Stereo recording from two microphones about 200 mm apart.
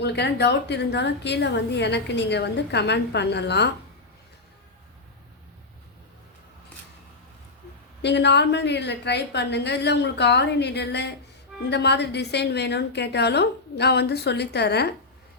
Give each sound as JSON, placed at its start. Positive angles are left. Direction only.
{"t": 0.0, "sound": "a woman's voice", "side_deg": 55}
{"t": 8.0, "sound": "a woman's voice", "side_deg": 55}